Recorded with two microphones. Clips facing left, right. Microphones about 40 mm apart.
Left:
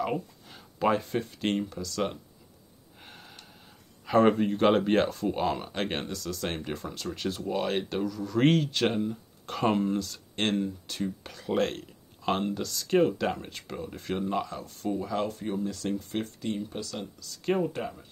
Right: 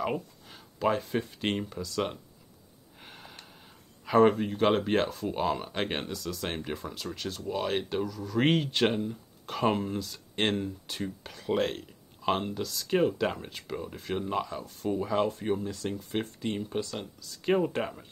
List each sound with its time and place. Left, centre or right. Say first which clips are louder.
0.0 s a sound: left 1 dB; centre
0.7 s speech: left 2 dB; centre
3.0 s gasp: right 1 dB; centre
4.0 s speech: even; centre
8.5 s speech: left 2 dB; centre
8.8 s speech: even; centre
16.2 s speech: even; centre
16.9 s speech: even; centre
17.7 s speech: right 2 dB; right